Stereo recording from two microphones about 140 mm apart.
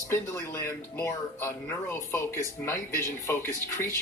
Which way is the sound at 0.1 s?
20° left (ahead or behind).